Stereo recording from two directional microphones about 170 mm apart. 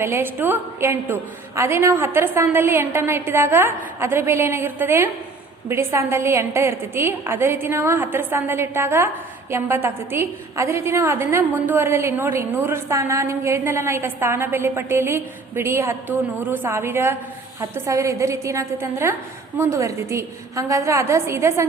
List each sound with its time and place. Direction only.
0.0 s a woman's voice: 15° right (ahead or behind)